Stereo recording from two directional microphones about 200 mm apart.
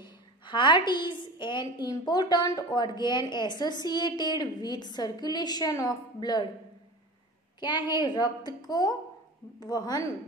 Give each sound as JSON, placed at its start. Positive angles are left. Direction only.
{"t": 0.0, "sound": "a woman's voice", "side_deg": 25}
{"t": 7.6, "sound": "a woman's voice", "side_deg": 20}